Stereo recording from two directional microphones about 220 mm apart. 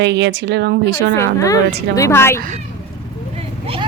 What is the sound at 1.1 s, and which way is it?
A woman's voice, 15° left (ahead or behind).